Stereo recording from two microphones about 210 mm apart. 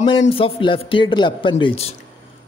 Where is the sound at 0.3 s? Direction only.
25° left (ahead or behind).